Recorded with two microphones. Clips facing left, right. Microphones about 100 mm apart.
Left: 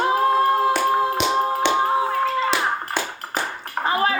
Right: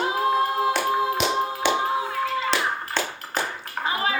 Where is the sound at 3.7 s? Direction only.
45° left (ahead or behind).